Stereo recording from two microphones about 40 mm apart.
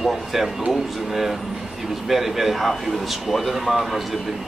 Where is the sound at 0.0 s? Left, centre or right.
Centre.